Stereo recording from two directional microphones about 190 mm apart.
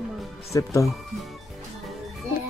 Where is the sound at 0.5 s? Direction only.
20° left (ahead or behind).